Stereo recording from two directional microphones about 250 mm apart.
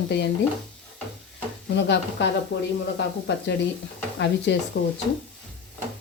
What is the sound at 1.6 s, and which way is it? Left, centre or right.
Speech, left.